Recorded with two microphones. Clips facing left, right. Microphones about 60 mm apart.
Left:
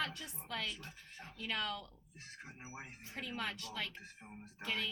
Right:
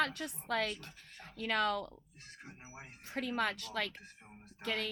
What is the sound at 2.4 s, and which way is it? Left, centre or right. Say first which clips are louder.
Speech: left 1 dB; centre.